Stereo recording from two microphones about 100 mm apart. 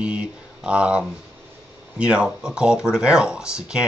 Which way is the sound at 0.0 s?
10° right (ahead or behind).